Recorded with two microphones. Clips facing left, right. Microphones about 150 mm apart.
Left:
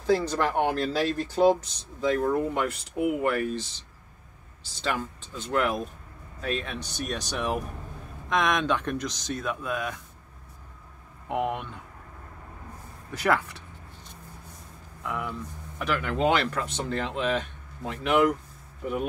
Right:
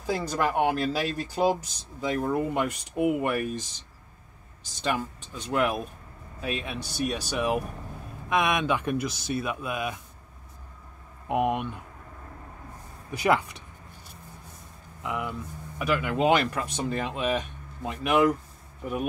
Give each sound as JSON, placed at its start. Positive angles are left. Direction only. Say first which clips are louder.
{"t": 0.0, "sound": "speech", "louder": "left 3 dB", "side_deg": -10}
{"t": 4.8, "sound": "speech", "louder": "right 1 dB", "side_deg": -15}
{"t": 11.2, "sound": "speech", "louder": "right 3 dB", "side_deg": -15}
{"t": 13.1, "sound": "a sound", "louder": "right 1 dB", "side_deg": -15}
{"t": 15.0, "sound": "speech", "louder": "right 1 dB", "side_deg": -15}